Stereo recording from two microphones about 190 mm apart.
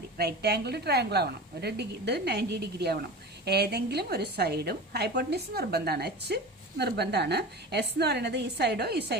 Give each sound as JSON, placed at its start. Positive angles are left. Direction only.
{"t": 0.2, "sound": "a woman's voice", "side_deg": -55}